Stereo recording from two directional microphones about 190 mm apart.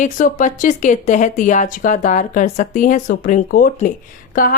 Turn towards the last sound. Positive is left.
turn(degrees=45)  # may be behind; listen again after turning